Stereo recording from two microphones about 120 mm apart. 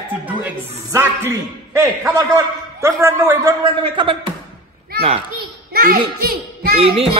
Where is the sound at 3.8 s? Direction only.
45° right (ahead or behind).